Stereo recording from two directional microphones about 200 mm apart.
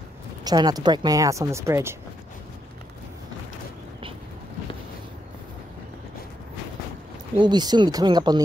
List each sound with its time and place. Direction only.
0.4 s speech: 20° right (ahead or behind)
7.3 s speech: 20° right (ahead or behind)